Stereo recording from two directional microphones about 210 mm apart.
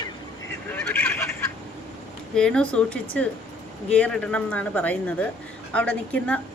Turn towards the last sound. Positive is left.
turn(degrees=5)  # may be behind; listen again after turning